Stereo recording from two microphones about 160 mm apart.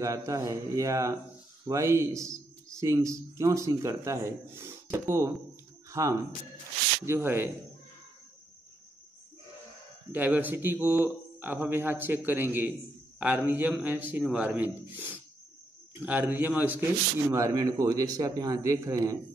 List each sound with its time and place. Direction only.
0.0 s a man's voice: 20° right (ahead or behind)
5.9 s a sound: 20° right (ahead or behind)
7.1 s a man's voice: 15° right (ahead or behind)
10.1 s a man's voice: 10° right (ahead or behind)